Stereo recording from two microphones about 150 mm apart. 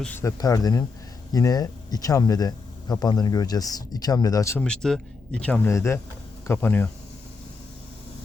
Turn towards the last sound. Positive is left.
turn(degrees=15)  # may be behind; listen again after turning